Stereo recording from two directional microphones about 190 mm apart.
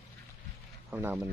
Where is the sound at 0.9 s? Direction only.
10° right (ahead or behind).